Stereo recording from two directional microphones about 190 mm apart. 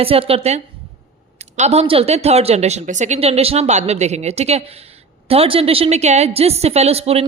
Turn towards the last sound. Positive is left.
turn(degrees=-30)  # may be behind; listen again after turning